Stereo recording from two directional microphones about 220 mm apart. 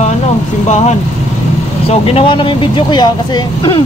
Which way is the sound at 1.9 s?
25° left (ahead or behind).